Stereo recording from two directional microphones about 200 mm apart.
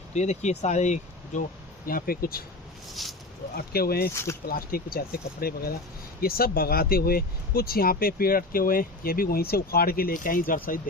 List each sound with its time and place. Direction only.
0.1 s speech: 35° left (ahead or behind)
2.9 s speech: centre (ahead or behind)
3.7 s speech: 50° left (ahead or behind)
4.1 s speech: 15° left (ahead or behind)
4.4 s speech: 50° left (ahead or behind)